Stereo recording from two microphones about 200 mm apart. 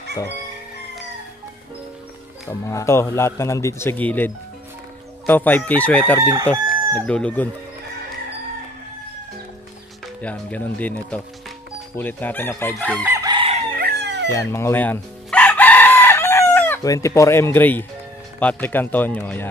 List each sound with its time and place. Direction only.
2.4 s speech: 15° left (ahead or behind)
6.1 s crowing: 15° right (ahead or behind)
6.7 s chicken: 5° left (ahead or behind)
10.2 s speech: 5° left (ahead or behind)
13.0 s chicken: 15° right (ahead or behind)
13.7 s chicken: 55° right (ahead or behind)
14.3 s chicken: 15° left (ahead or behind)
18.4 s speech: 10° left (ahead or behind)